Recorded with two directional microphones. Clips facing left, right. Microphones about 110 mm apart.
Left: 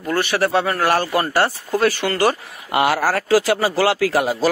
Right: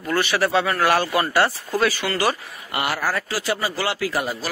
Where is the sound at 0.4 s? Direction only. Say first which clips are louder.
Left 2 dB; 50° left (ahead or behind).